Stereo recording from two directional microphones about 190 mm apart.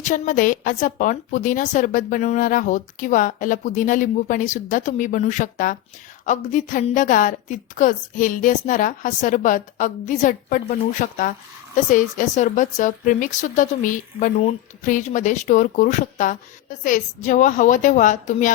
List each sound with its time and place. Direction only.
0.0 s a woman's voice: 45° left (ahead or behind)